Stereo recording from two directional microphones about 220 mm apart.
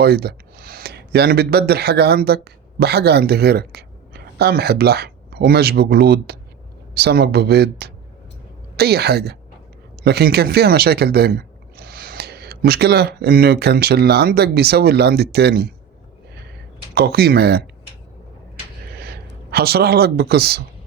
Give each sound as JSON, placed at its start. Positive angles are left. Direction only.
{"t": 0.0, "sound": "speech", "side_deg": -45}
{"t": 16.9, "sound": "speech", "side_deg": -45}
{"t": 18.9, "sound": "speech", "side_deg": -45}